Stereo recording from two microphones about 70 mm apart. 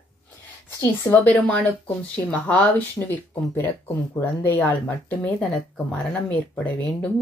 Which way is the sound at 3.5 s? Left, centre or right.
Left.